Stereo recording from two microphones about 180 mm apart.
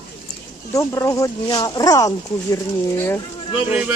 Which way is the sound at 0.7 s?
20° left (ahead or behind).